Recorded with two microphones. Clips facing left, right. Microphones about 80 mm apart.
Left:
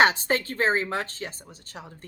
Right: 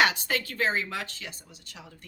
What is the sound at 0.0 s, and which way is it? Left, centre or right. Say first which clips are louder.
A woman's voice: left 4 dB; left.